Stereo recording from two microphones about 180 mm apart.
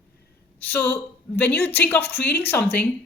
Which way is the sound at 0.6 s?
10° left (ahead or behind).